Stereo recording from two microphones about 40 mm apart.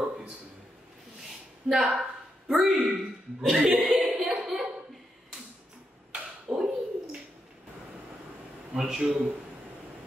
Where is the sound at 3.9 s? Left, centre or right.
Centre.